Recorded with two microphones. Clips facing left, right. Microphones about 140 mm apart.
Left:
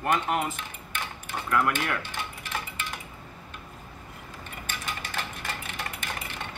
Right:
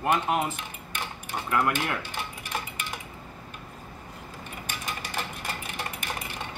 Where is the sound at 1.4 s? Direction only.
15° right (ahead or behind).